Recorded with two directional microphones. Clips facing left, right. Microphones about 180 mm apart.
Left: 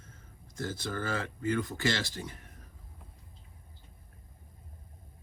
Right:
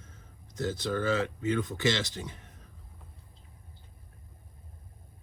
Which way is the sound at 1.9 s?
20° right (ahead or behind).